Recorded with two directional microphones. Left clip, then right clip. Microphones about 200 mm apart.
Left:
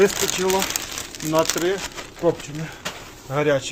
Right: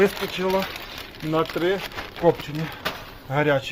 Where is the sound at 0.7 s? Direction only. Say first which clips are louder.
Left 6 dB; 70° left (ahead or behind).